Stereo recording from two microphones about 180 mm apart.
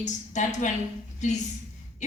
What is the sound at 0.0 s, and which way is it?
A woman's voice, 40° left (ahead or behind).